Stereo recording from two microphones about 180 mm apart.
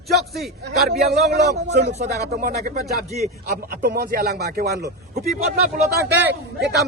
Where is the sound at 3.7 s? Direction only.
60° right (ahead or behind).